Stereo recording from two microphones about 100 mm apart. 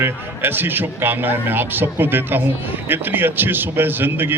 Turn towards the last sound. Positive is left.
turn(degrees=-20)  # may be behind; listen again after turning